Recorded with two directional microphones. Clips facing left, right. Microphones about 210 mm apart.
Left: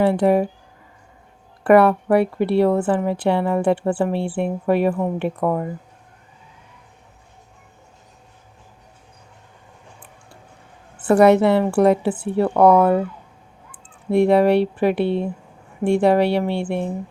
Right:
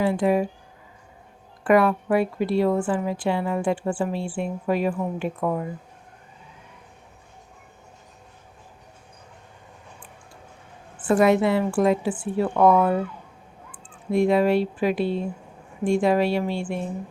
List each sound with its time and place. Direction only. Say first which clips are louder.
0.0 s speech: left 5 dB; 60° left (ahead or behind)
1.6 s speech: left 5 dB; 65° left (ahead or behind)
10.9 s speech: left 5 dB; 65° left (ahead or behind)
14.1 s speech: left 4 dB; 65° left (ahead or behind)